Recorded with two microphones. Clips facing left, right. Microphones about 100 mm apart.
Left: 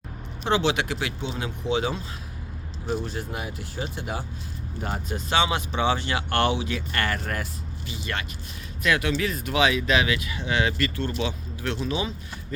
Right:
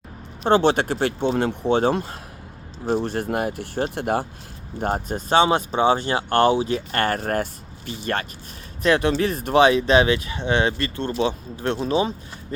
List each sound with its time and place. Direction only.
0.4 s speech: 45° right (ahead or behind)
4.8 s speech: 45° right (ahead or behind)
8.8 s speech: 35° right (ahead or behind)